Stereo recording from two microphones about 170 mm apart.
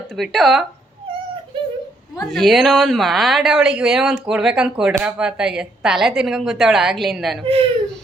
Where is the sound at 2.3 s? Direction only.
Centre (ahead or behind).